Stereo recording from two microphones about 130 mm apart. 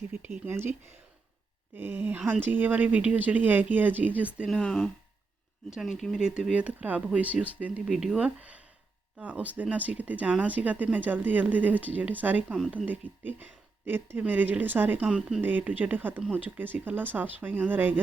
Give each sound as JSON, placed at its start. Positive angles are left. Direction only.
{"t": 0.1, "sound": "speech", "side_deg": -15}
{"t": 4.4, "sound": "speech", "side_deg": 5}